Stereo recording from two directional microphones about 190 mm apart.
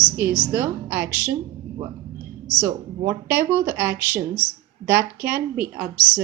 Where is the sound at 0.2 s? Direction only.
10° right (ahead or behind).